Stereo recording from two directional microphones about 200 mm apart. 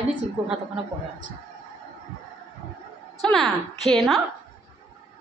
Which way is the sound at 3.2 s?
Centre (ahead or behind).